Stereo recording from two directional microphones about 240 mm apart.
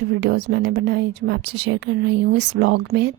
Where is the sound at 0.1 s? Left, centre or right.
Right.